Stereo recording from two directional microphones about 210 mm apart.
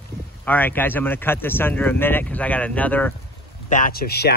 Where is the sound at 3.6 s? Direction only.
40° left (ahead or behind).